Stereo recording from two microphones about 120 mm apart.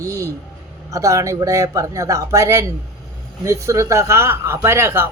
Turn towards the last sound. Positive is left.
turn(degrees=-20)  # may be behind; listen again after turning